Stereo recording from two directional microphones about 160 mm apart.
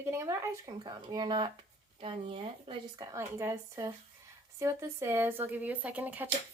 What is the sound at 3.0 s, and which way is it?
Speech, 15° right (ahead or behind).